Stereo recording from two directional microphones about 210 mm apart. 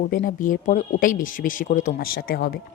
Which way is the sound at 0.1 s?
40° left (ahead or behind).